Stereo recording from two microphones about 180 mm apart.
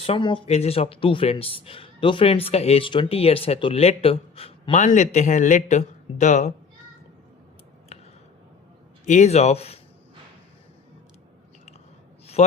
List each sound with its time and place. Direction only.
0.0 s speech: 30° left (ahead or behind)
9.0 s speech: 40° left (ahead or behind)
12.4 s speech: 40° left (ahead or behind)